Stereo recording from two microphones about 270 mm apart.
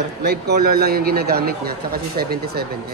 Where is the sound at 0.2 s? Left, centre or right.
Right.